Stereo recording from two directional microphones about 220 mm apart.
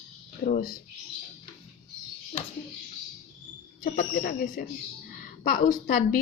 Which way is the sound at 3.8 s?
40° left (ahead or behind).